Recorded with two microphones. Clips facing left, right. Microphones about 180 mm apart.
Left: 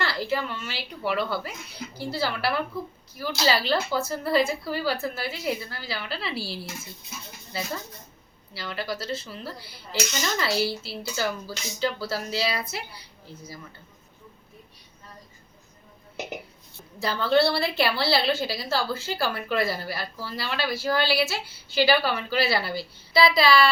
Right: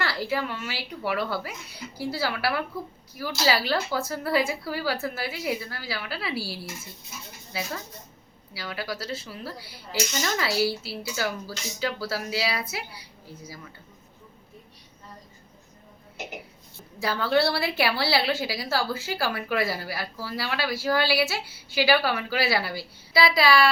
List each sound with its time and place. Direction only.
0.0 s a woman's voice: 10° right (ahead or behind)
8.5 s a woman's voice: 5° right (ahead or behind)
17.0 s a woman's voice: 10° right (ahead or behind)